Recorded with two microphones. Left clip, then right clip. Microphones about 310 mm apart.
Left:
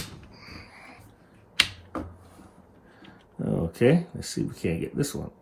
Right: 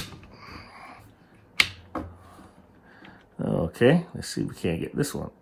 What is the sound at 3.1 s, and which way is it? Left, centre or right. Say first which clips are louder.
Speech: right 2 dB; centre.